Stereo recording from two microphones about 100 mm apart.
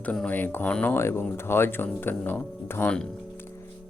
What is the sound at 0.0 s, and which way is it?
Speech, 15° left (ahead or behind).